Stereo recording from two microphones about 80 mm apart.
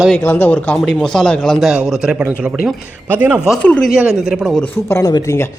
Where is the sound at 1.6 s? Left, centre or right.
Centre.